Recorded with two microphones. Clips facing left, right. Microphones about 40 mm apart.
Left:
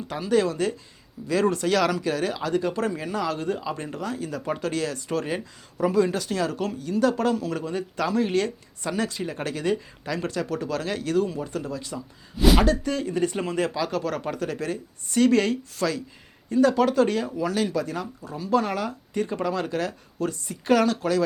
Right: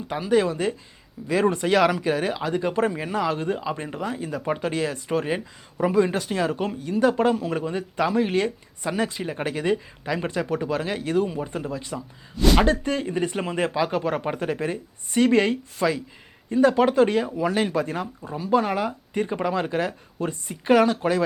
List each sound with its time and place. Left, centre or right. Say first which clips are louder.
0.1 s speech: right 2 dB; centre
18.2 s speech: right 2 dB; right